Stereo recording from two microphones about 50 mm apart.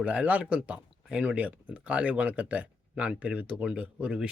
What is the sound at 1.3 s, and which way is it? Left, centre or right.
Speech, right.